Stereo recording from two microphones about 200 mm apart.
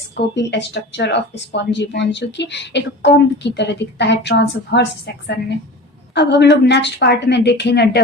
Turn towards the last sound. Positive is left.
turn(degrees=55)  # may be behind; listen again after turning